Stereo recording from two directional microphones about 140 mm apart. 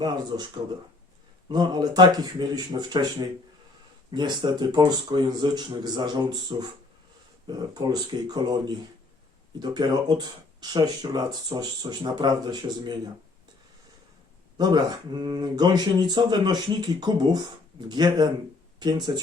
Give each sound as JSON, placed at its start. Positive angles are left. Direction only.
{"t": 0.0, "sound": "speech", "side_deg": -30}
{"t": 1.5, "sound": "speech", "side_deg": -30}
{"t": 14.6, "sound": "speech", "side_deg": -30}